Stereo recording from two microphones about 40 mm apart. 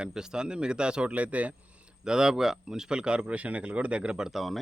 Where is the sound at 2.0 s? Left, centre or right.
Centre.